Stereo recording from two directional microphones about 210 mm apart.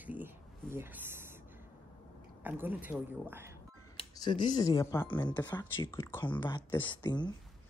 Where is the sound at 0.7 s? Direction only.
10° right (ahead or behind).